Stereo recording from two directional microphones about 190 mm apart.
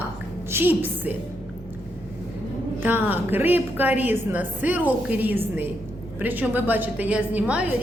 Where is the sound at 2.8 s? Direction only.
10° right (ahead or behind).